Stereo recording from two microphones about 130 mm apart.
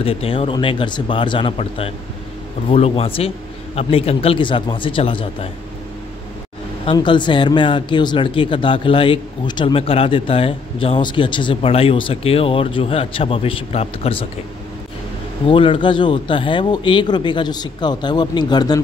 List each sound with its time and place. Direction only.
0.0 s a man's voice: 45° left (ahead or behind)
6.9 s speech: 40° left (ahead or behind)
15.4 s speech: 40° left (ahead or behind)